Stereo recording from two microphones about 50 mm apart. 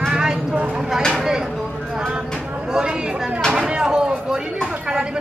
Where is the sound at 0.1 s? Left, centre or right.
Centre.